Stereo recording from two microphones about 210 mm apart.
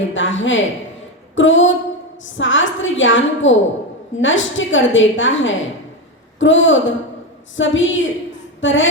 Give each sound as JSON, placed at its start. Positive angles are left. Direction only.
{"t": 0.1, "sound": "a woman's voice", "side_deg": 65}